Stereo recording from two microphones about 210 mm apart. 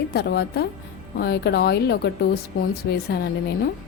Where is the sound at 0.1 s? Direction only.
50° left (ahead or behind).